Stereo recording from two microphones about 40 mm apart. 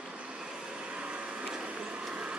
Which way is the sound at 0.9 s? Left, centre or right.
Right.